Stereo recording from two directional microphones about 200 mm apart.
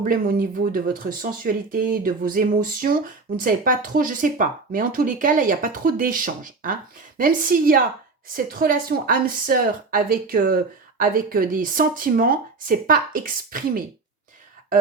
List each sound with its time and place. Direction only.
0.0 s speech: 45° right (ahead or behind)